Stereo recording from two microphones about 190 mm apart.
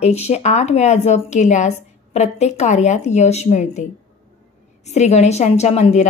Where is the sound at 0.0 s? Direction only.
35° left (ahead or behind).